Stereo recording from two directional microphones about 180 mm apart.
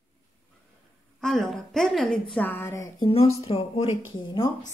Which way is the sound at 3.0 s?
30° left (ahead or behind).